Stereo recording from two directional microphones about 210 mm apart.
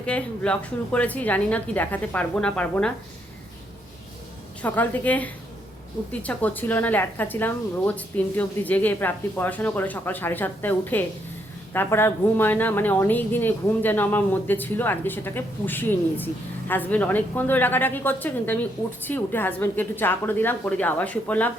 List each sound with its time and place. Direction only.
0.0 s speech: 5° left (ahead or behind)
4.6 s speech: 10° left (ahead or behind)